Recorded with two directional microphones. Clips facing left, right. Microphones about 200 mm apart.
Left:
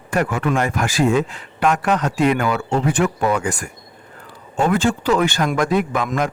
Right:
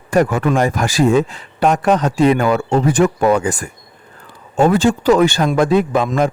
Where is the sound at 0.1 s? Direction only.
35° right (ahead or behind).